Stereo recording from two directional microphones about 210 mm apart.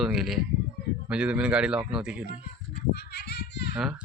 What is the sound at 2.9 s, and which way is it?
Children playing, 50° left (ahead or behind).